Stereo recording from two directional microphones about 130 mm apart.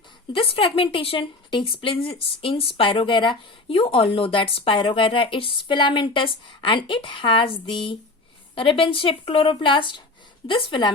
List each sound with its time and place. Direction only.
0.3 s a woman's voice: 45° left (ahead or behind)